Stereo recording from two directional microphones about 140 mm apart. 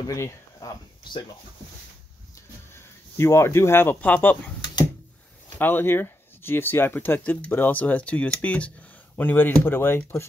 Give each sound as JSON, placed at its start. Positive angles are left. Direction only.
{"t": 0.0, "sound": "speech", "side_deg": 25}
{"t": 2.7, "sound": "speech", "side_deg": 20}
{"t": 5.6, "sound": "speech", "side_deg": 15}